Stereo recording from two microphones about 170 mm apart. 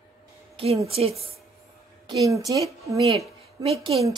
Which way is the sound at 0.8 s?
35° right (ahead or behind).